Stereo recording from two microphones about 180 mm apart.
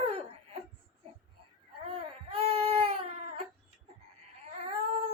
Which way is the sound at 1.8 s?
35° right (ahead or behind).